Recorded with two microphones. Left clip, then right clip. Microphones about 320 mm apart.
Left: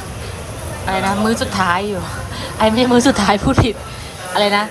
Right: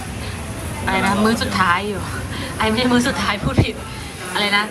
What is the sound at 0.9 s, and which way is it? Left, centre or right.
Speech, centre.